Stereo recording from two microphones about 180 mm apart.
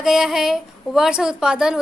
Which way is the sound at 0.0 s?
Centre (ahead or behind).